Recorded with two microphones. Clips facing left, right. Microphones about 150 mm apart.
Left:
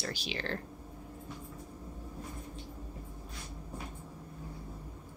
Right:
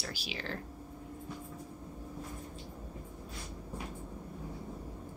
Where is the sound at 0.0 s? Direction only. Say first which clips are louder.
Left 3 dB; 5° right (ahead or behind).